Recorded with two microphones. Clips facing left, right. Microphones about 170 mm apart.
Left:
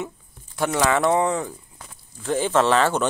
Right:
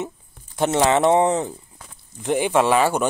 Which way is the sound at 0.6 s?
25° right (ahead or behind).